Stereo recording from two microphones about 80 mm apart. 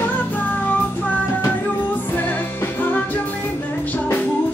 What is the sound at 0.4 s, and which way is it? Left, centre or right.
Child singing, left.